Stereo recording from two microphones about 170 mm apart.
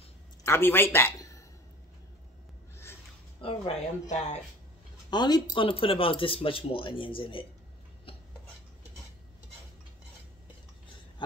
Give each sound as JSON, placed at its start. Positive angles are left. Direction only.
{"t": 0.4, "sound": "a man's voice", "side_deg": 15}
{"t": 2.7, "sound": "a sound", "side_deg": 15}
{"t": 3.3, "sound": "speech", "side_deg": 35}
{"t": 5.1, "sound": "speech", "side_deg": 25}